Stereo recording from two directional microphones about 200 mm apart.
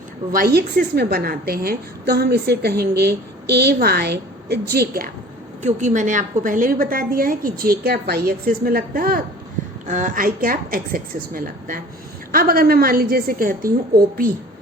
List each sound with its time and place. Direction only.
0.3 s a woman's voice: 50° right (ahead or behind)
5.6 s a woman's voice: 40° right (ahead or behind)
9.8 s a woman's voice: 40° right (ahead or behind)